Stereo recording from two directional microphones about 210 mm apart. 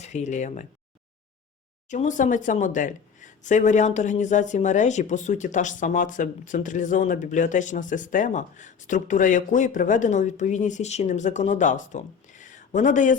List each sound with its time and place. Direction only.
0.0 s speech: 35° left (ahead or behind)
1.9 s speech: 35° left (ahead or behind)